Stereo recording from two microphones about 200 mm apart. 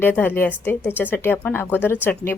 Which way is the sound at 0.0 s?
10° left (ahead or behind).